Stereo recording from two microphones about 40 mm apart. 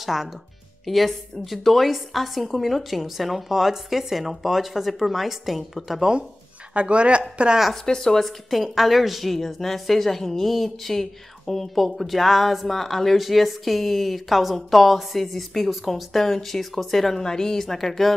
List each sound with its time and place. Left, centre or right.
0.0 s a woman's voice: centre
6.7 s speech: right
7.7 s speech: centre
8.6 s a woman's voice: centre